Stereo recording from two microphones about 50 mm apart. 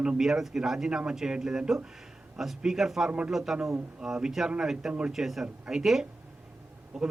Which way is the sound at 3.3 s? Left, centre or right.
Centre.